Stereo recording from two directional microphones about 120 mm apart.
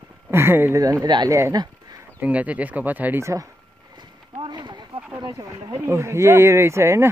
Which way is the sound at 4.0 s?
40° right (ahead or behind).